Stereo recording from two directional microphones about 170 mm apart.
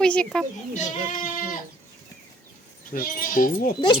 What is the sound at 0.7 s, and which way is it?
Speech, 55° left (ahead or behind).